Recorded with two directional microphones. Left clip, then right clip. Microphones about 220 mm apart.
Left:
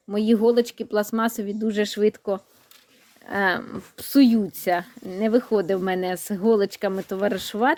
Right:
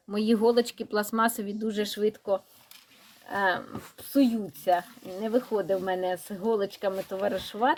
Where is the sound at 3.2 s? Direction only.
55° left (ahead or behind).